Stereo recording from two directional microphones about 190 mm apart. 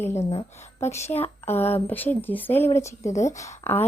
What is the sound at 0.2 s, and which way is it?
Speech, 30° left (ahead or behind).